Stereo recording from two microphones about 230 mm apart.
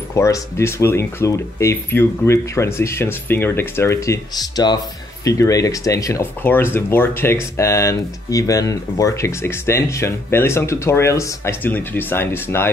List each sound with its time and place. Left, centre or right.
0.1 s speech: centre